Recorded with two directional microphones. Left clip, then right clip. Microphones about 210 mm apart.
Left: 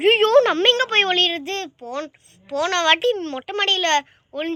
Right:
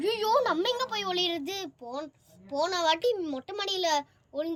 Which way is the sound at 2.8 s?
Centre (ahead or behind).